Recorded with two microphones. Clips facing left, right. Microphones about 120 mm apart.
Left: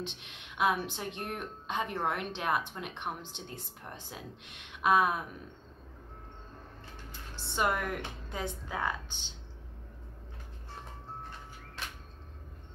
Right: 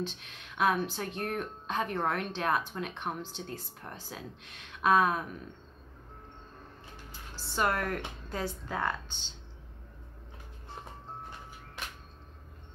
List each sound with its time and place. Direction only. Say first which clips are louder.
0.0 s speech: right 4 dB; 20° left (ahead or behind)
7.1 s speech: left 1 dB; 15° left (ahead or behind)